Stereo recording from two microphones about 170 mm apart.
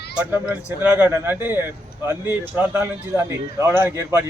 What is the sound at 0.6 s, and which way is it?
Speech, 15° left (ahead or behind).